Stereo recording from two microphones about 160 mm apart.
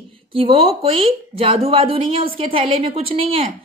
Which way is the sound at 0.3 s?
35° right (ahead or behind).